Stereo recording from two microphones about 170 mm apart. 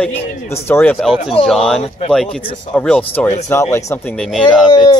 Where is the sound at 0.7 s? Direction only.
15° left (ahead or behind).